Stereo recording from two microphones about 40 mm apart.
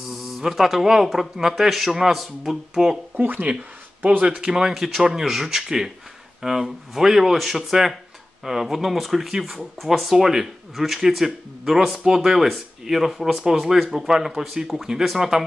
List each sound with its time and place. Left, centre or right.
0.1 s speech: centre
3.2 s speech: right
4.2 s speech: right
4.5 s speech: centre